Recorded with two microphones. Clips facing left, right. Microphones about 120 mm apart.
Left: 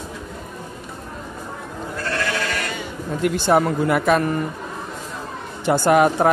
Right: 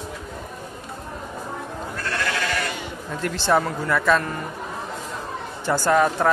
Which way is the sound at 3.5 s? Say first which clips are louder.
Left 3 dB; 20° left (ahead or behind).